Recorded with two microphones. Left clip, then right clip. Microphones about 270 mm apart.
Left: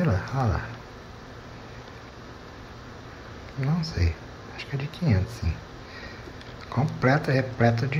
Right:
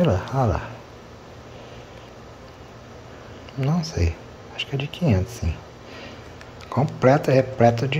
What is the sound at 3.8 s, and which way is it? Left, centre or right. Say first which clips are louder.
Speech: right 4 dB; right.